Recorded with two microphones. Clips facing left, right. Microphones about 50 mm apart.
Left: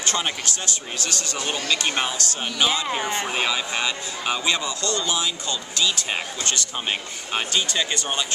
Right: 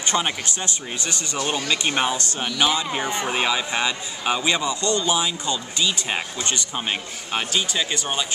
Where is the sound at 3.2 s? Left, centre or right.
Centre.